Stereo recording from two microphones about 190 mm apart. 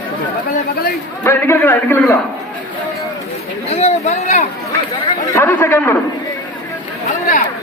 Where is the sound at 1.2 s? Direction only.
10° left (ahead or behind).